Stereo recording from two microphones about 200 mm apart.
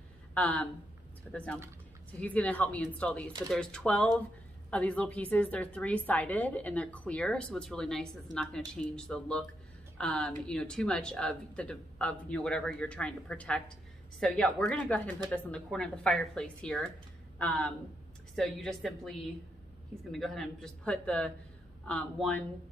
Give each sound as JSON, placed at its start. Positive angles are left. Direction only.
{"t": 0.3, "sound": "a woman's voice", "side_deg": 5}